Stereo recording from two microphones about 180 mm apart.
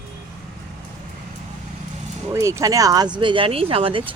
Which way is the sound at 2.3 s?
15° right (ahead or behind).